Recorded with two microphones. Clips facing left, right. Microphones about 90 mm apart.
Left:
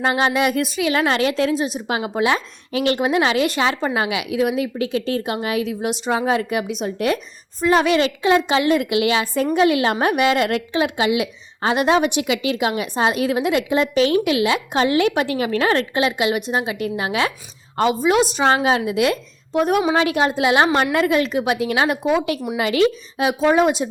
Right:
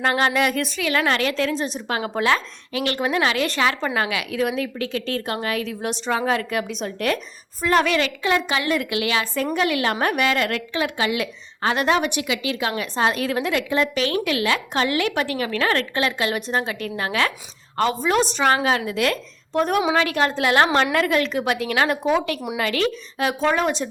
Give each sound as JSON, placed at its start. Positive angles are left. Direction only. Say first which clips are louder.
{"t": 0.0, "sound": "a woman's voice", "louder": "left 2 dB", "side_deg": 15}
{"t": 1.5, "sound": "a woman's voice", "louder": "left 3 dB", "side_deg": 5}
{"t": 2.3, "sound": "a woman's voice", "louder": "left 1 dB", "side_deg": 25}
{"t": 7.9, "sound": "a woman's voice", "louder": "left 5 dB", "side_deg": 25}
{"t": 18.4, "sound": "a woman's voice", "louder": "left 2 dB", "side_deg": 20}
{"t": 19.9, "sound": "a woman's voice", "louder": "left 2 dB", "side_deg": 20}